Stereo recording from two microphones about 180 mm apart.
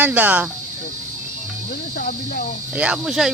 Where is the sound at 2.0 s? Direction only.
50° left (ahead or behind).